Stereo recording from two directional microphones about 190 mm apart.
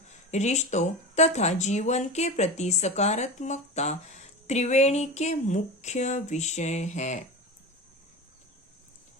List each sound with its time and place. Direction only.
0.3 s speech: 35° left (ahead or behind)